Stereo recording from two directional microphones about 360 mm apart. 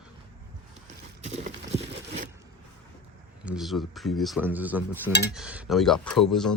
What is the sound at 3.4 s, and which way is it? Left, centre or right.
Cutlery, centre.